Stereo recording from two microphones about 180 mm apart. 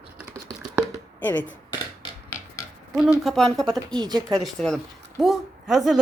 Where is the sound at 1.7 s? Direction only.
20° left (ahead or behind).